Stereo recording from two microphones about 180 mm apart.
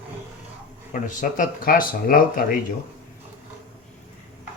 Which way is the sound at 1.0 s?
50° left (ahead or behind).